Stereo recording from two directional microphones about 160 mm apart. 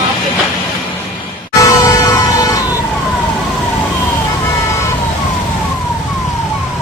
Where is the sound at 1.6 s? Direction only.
20° left (ahead or behind).